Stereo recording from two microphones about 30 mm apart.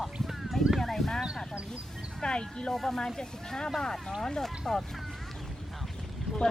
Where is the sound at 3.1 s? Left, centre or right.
Left.